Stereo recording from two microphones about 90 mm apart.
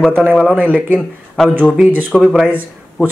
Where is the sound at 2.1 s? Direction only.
Centre (ahead or behind).